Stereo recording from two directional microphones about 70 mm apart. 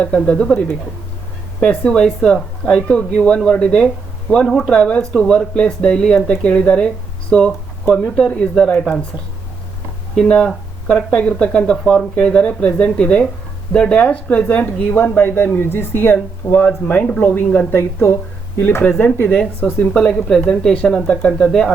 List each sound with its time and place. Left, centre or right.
0.0 s speech: centre
1.6 s speech: centre
4.4 s speech: centre
4.7 s speech: centre
10.2 s a woman's voice: centre; by 18.1 s left
18.8 s speech: left